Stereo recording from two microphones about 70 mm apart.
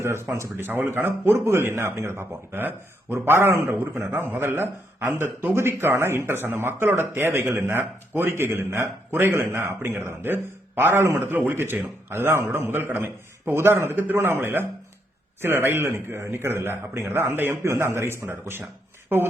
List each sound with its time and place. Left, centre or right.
0.0 s speech: right
0.5 s speech: right